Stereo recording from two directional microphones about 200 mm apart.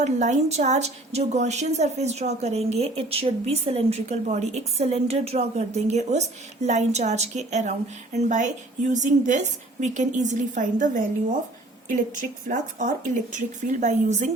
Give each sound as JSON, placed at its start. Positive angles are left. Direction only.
{"t": 0.0, "sound": "a woman's voice", "side_deg": -35}
{"t": 12.5, "sound": "a woman's voice", "side_deg": -40}